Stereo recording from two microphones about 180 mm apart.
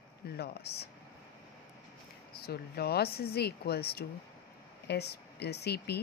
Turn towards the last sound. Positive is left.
turn(degrees=65)  # may be behind; listen again after turning